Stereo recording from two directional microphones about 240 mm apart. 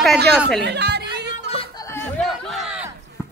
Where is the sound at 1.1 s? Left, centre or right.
Right.